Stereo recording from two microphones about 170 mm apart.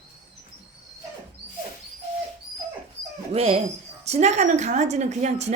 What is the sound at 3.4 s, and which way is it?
A woman's voice, 40° right (ahead or behind).